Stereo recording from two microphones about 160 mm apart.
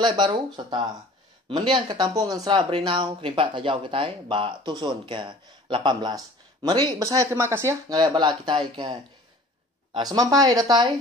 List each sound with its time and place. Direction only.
0.0 s speech: 30° right (ahead or behind)
9.9 s speech: 25° right (ahead or behind)